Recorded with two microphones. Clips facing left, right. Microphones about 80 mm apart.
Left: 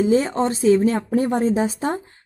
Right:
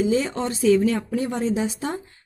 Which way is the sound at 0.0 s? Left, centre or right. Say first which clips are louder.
Left 4 dB; left.